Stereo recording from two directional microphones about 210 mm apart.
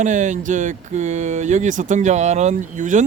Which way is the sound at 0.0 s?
35° right (ahead or behind).